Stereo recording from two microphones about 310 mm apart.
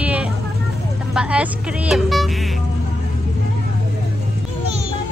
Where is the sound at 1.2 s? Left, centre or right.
Centre.